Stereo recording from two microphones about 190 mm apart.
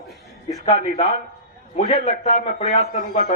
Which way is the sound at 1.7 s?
35° left (ahead or behind).